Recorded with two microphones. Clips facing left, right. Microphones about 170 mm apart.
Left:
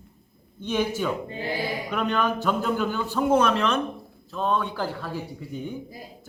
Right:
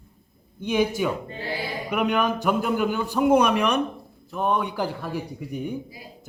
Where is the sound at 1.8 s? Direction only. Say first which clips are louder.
Right 4 dB; 15° right (ahead or behind).